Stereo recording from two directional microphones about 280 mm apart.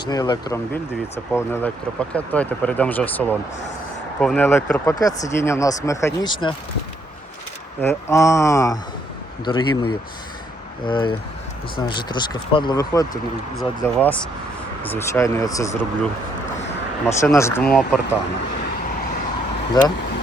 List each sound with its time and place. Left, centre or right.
0.1 s speech: centre
7.8 s speech: centre
17.2 s speech: centre
19.8 s speech: centre